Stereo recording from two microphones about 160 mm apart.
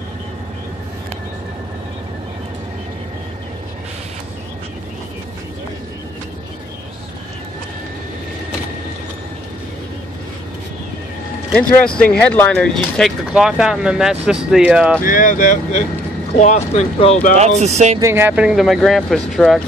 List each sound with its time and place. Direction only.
12.0 s speech: 10° left (ahead or behind); by 15.0 s 10° right (ahead or behind)
15.0 s speech: 60° left (ahead or behind)
17.4 s speech: 45° right (ahead or behind)
18.0 s speech: 15° right (ahead or behind)